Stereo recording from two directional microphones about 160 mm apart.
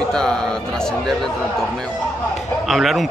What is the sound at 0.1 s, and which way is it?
Speech, 5° left (ahead or behind).